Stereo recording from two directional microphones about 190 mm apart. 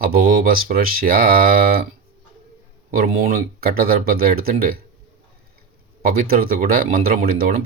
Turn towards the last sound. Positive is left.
turn(degrees=-50)  # may be behind; listen again after turning